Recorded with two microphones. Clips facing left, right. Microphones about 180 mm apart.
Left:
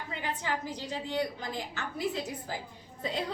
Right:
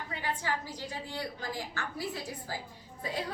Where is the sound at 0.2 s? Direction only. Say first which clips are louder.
Left 1 dB; 20° left (ahead or behind).